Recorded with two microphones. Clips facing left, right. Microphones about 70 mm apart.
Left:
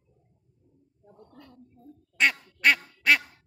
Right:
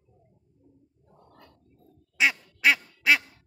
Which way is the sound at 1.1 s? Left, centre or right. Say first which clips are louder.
Left 3 dB; centre.